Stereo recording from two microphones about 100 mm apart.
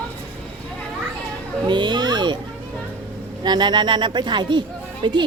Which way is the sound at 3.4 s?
50° right (ahead or behind).